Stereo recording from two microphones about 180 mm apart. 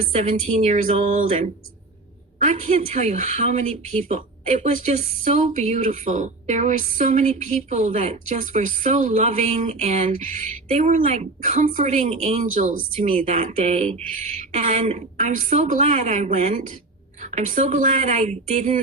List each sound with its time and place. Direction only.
0.2 s a woman's voice: 45° right (ahead or behind)
2.4 s a woman's voice: 40° right (ahead or behind)